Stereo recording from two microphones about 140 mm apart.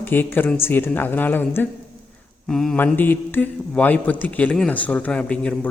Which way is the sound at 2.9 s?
15° left (ahead or behind).